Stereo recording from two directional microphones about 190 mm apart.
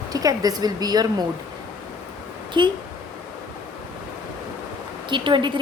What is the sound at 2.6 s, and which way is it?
Speech, 25° right (ahead or behind).